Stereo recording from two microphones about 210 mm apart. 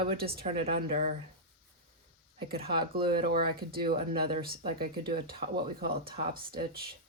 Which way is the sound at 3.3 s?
45° right (ahead or behind).